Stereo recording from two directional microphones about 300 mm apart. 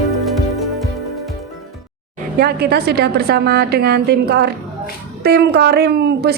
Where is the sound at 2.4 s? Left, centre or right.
Right.